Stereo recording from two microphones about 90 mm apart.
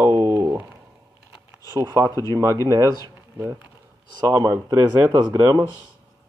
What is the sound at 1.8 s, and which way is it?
Speech, 40° right (ahead or behind).